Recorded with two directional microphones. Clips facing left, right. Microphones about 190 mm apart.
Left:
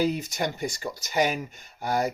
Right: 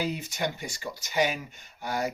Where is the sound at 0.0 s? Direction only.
40° left (ahead or behind).